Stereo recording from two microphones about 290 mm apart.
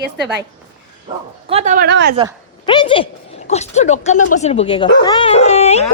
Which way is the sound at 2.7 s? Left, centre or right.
Centre.